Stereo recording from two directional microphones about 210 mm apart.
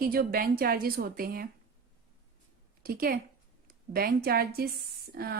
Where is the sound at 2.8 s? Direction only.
45° right (ahead or behind).